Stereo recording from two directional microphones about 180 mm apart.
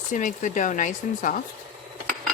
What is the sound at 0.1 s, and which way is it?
Speech, 45° left (ahead or behind).